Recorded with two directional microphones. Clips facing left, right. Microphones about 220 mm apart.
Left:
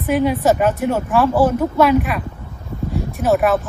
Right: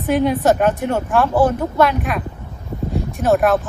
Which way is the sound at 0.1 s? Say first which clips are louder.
Even; 5° left (ahead or behind).